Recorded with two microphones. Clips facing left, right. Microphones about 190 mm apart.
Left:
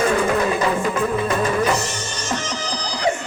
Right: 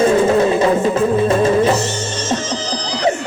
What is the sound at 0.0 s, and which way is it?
Music, 25° right (ahead or behind).